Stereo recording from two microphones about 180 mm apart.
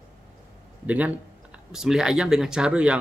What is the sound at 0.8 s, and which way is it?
Speech, 10° right (ahead or behind).